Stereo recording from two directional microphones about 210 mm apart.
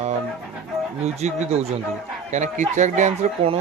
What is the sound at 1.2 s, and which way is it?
Speech, 30° right (ahead or behind).